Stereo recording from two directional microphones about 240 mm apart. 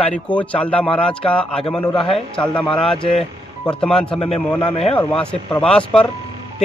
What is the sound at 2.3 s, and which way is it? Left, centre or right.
Speech, centre.